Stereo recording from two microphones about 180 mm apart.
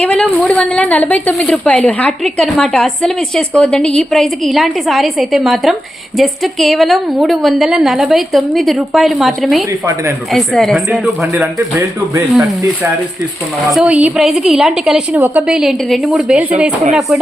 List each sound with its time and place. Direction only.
0.0 s a woman's voice: 5° left (ahead or behind)
12.1 s a woman's voice: 15° right (ahead or behind)